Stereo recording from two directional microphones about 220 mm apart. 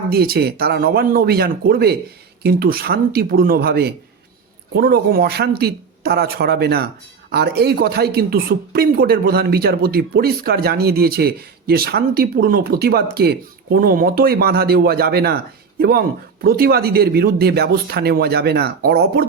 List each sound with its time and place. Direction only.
0.1 s speech: 45° right (ahead or behind)